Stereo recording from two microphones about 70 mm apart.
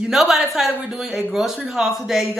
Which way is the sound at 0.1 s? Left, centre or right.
Centre.